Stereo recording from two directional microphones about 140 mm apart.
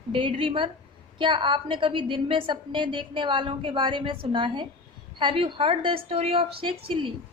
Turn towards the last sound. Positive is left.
turn(degrees=-40)  # may be behind; listen again after turning